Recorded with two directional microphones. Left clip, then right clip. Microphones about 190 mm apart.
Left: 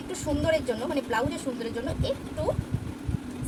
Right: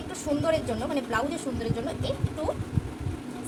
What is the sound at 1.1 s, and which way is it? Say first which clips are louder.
Speech: left 1 dB; 20° left (ahead or behind).